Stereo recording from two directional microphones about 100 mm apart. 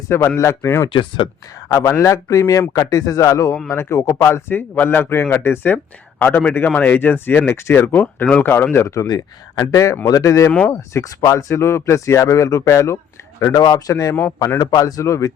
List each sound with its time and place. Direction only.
0.1 s speech: 25° left (ahead or behind)
0.9 s speech: 55° left (ahead or behind)
1.6 s speech: 30° left (ahead or behind)
9.0 s speech: 40° left (ahead or behind)